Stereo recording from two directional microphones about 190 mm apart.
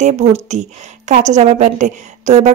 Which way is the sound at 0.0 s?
35° right (ahead or behind).